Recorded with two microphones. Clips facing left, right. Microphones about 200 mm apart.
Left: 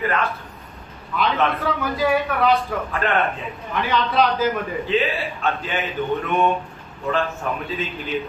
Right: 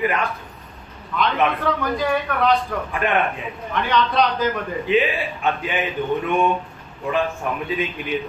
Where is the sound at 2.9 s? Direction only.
15° right (ahead or behind).